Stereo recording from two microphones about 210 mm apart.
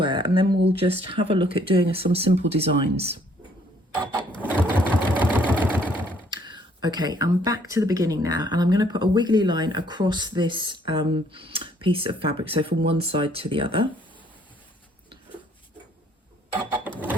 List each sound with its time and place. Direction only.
0.0 s speech: 25° right (ahead or behind)
0.5 s speech: 55° right (ahead or behind)
0.8 s speech: 25° right (ahead or behind)
3.9 s printer: 20° right (ahead or behind)
4.4 s sewing machine: 10° right (ahead or behind)
6.3 s speech: 20° right (ahead or behind)